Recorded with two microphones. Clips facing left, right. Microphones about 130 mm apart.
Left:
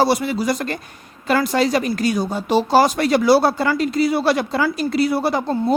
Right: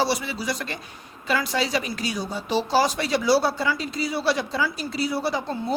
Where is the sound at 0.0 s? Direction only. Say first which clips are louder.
Left 7 dB; 50° left (ahead or behind).